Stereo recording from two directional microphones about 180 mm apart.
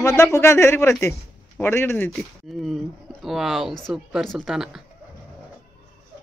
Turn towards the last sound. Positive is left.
turn(degrees=0)  # may be behind; listen again after turning